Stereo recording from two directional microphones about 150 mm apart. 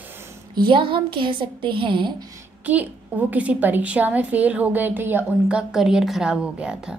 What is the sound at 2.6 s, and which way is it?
A woman's voice, 10° right (ahead or behind).